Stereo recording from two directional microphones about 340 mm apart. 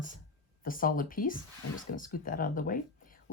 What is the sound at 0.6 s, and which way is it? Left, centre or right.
Speech, left.